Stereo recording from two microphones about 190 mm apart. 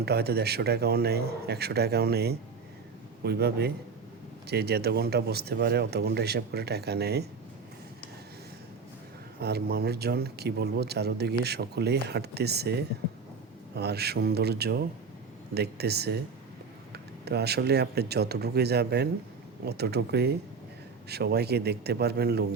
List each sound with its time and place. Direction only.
0.0 s speech: 55° right (ahead or behind)
9.4 s speech: 55° right (ahead or behind)